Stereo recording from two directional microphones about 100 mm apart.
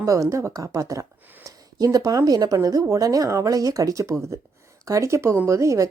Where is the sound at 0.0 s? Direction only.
30° right (ahead or behind).